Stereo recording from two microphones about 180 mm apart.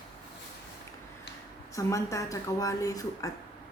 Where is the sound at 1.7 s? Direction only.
15° left (ahead or behind).